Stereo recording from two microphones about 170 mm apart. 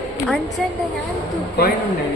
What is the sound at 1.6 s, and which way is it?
Speech, 65° left (ahead or behind).